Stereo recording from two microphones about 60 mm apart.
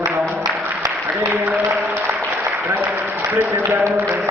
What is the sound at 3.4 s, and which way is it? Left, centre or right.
Music, right.